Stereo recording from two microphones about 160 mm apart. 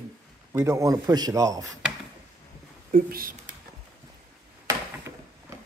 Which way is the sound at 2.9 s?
60° right (ahead or behind).